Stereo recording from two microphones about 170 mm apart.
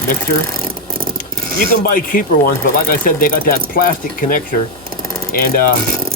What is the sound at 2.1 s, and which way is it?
Speech, 50° left (ahead or behind).